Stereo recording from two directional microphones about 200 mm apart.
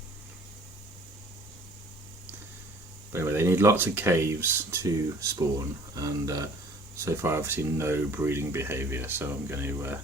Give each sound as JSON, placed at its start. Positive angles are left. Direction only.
{"t": 3.1, "sound": "speech", "side_deg": -10}